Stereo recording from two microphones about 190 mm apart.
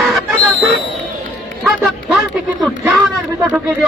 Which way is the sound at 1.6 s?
Centre (ahead or behind).